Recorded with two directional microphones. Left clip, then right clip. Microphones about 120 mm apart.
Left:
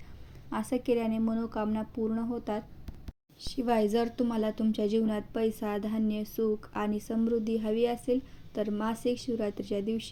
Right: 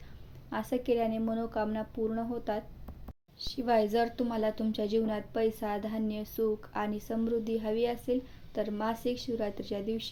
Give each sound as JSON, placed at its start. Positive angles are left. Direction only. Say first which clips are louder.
{"t": 0.5, "sound": "a woman's voice", "louder": "left 1 dB", "side_deg": 40}